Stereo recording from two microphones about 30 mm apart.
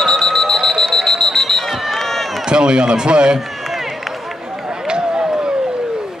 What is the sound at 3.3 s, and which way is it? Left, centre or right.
Run, centre.